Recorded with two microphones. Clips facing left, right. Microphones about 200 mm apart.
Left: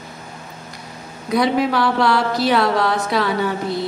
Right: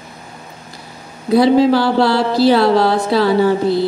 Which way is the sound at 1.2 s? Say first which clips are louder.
Right 7 dB; 30° right (ahead or behind).